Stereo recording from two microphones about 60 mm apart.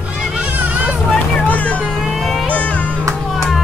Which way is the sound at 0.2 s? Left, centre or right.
Centre.